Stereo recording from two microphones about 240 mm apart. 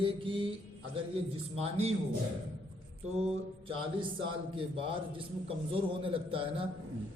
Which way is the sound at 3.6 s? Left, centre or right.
Right.